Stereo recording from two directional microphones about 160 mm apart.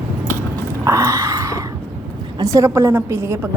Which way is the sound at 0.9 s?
20° right (ahead or behind).